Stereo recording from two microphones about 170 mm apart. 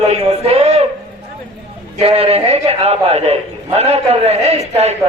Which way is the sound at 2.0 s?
35° right (ahead or behind).